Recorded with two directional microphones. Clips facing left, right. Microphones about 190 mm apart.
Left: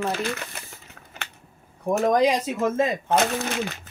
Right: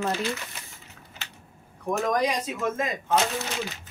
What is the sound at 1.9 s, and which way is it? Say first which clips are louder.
Speech: left 5 dB; 25° left (ahead or behind).